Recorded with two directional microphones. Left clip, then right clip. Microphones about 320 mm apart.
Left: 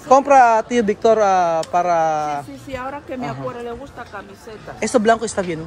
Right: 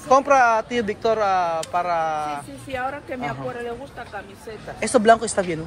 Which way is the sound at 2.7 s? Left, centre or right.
Left.